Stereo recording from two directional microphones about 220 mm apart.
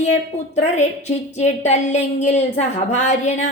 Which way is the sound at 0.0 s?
30° left (ahead or behind).